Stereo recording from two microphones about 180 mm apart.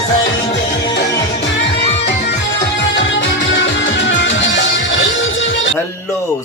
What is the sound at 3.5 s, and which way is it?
Music, 70° left (ahead or behind).